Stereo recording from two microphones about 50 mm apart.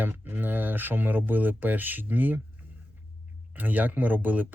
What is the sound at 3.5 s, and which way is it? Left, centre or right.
Speech, right.